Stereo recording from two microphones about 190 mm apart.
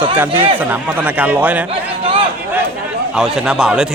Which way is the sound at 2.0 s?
30° right (ahead or behind).